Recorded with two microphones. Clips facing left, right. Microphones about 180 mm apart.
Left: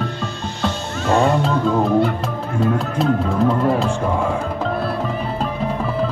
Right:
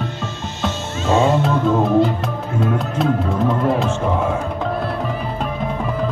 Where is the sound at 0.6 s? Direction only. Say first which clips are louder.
Even; 20° right (ahead or behind).